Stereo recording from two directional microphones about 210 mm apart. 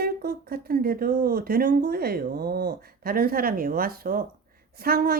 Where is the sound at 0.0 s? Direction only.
45° right (ahead or behind).